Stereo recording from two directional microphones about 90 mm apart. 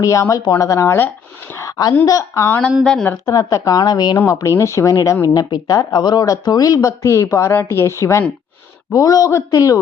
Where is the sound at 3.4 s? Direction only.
40° left (ahead or behind).